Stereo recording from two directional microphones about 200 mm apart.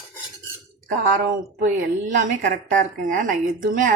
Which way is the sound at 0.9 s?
40° right (ahead or behind).